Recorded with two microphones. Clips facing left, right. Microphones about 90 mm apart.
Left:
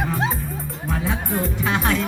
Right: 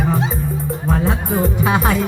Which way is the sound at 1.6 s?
10° right (ahead or behind).